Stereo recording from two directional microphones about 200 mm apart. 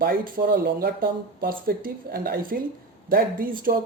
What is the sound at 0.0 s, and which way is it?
Speech, 45° right (ahead or behind).